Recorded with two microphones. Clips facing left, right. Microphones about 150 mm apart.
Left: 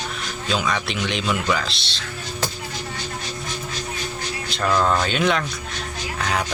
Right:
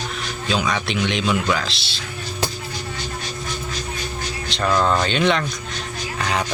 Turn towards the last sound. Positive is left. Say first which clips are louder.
# right 1 dB
turn(degrees=0)  # may be behind; listen again after turning